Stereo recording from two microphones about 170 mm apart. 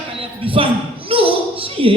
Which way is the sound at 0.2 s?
30° right (ahead or behind).